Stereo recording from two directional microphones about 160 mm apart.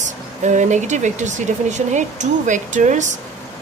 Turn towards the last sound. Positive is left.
turn(degrees=-50)  # may be behind; listen again after turning